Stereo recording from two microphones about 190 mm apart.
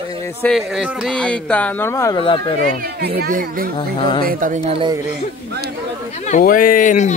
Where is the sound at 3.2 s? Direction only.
45° right (ahead or behind).